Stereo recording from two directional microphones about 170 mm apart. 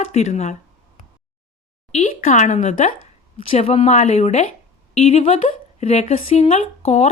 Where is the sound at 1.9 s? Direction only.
45° left (ahead or behind).